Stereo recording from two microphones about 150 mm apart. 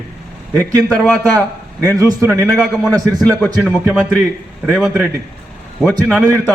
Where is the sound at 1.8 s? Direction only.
20° right (ahead or behind).